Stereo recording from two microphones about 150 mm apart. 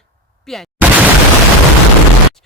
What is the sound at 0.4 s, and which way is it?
Speech, centre (ahead or behind).